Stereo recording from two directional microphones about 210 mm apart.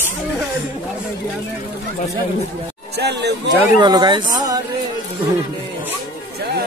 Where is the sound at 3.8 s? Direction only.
20° right (ahead or behind).